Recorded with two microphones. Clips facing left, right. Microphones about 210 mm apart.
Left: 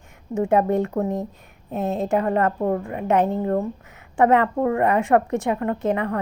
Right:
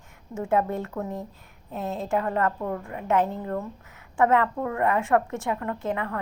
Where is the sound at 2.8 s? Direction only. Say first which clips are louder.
Left 4 dB; 20° left (ahead or behind).